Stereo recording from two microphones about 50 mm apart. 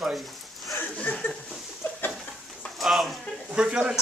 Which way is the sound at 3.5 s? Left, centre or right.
Right.